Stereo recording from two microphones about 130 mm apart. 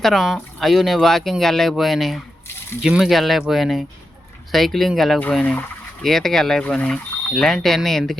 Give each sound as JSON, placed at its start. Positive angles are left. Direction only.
{"t": 0.0, "sound": "speech", "side_deg": 0}